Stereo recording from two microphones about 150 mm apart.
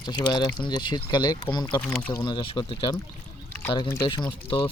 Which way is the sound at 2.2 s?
30° left (ahead or behind).